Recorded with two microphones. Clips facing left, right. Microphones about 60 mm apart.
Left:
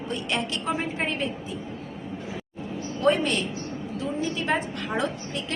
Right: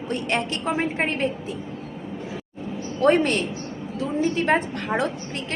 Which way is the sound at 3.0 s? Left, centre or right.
Right.